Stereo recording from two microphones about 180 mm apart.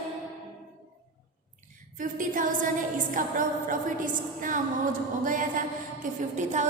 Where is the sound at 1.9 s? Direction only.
50° right (ahead or behind).